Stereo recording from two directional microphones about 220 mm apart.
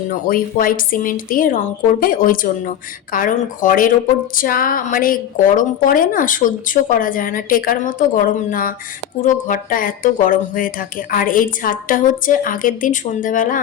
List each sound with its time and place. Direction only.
0.1 s speech: 40° left (ahead or behind)